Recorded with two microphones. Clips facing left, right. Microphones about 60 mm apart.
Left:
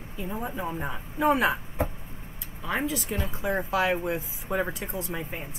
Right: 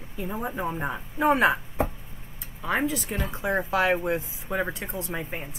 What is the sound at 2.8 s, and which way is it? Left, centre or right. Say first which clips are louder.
Speech: right 1 dB; centre.